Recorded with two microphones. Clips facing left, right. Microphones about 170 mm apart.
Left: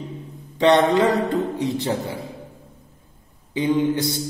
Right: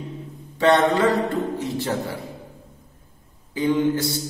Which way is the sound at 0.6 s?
20° left (ahead or behind).